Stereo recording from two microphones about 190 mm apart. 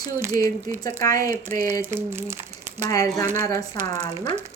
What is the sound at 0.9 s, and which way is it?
Speech, 20° left (ahead or behind).